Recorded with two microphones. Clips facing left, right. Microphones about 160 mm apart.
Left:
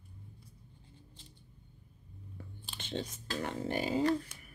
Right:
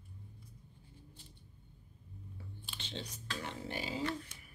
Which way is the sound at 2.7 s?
50° left (ahead or behind).